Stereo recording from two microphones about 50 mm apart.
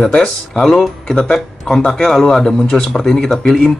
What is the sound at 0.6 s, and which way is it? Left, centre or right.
Speech, centre.